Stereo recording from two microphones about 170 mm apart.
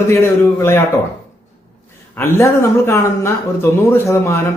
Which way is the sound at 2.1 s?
15° left (ahead or behind).